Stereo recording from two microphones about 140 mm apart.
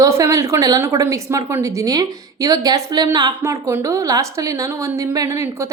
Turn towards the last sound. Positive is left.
turn(degrees=-20)  # may be behind; listen again after turning